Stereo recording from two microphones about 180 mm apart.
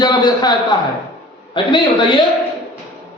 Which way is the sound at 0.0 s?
20° left (ahead or behind).